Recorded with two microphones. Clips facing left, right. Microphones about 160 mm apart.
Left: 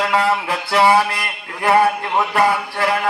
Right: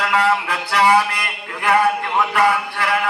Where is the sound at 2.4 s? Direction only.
40° left (ahead or behind).